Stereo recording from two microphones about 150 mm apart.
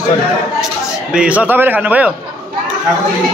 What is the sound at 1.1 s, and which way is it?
A man's voice, 10° right (ahead or behind).